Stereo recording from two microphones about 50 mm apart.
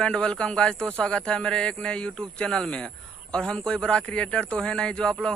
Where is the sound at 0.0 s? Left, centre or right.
Centre.